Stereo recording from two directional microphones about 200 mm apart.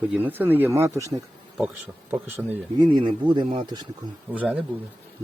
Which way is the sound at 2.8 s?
25° right (ahead or behind).